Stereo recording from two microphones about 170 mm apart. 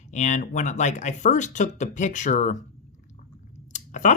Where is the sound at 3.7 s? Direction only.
45° left (ahead or behind).